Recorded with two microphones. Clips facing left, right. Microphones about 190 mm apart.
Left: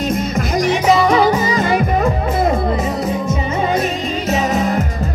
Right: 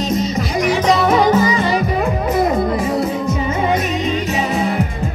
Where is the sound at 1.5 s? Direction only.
45° left (ahead or behind).